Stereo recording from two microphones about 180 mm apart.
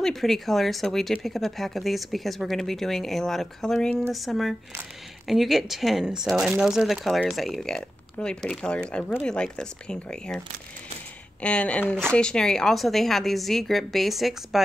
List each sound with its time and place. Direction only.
0.0 s speech: centre (ahead or behind)
11.4 s speech: 5° left (ahead or behind)